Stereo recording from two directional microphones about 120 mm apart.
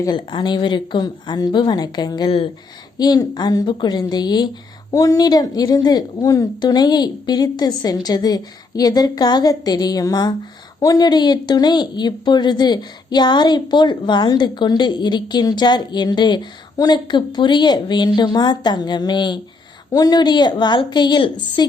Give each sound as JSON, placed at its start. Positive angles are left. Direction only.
{"t": 0.3, "sound": "speech", "side_deg": 40}